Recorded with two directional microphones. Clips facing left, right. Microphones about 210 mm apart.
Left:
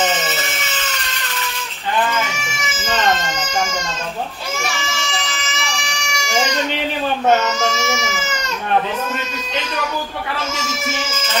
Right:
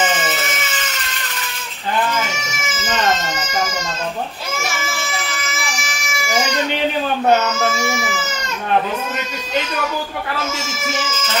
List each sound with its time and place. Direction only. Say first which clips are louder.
7.6 s baby cry: even; 5° right (ahead or behind)